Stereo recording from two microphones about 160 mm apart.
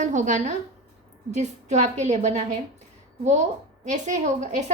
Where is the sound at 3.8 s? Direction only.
50° right (ahead or behind).